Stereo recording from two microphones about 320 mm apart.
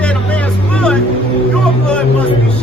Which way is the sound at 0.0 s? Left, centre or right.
Centre.